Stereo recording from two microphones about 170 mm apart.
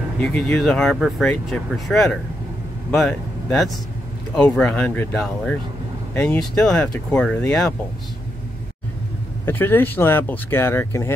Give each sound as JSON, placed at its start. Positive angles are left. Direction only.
{"t": 0.2, "sound": "speech", "side_deg": 5}
{"t": 9.5, "sound": "speech", "side_deg": 10}